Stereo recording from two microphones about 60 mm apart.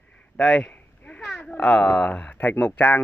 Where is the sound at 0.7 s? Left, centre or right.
Left.